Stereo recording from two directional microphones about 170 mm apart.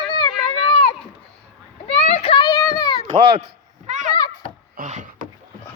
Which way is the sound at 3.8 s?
45° right (ahead or behind).